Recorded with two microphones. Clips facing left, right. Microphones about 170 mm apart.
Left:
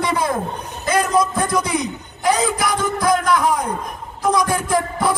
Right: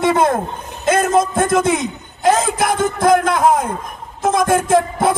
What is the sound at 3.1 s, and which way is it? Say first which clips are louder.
Speech: right 3 dB; 50° right (ahead or behind).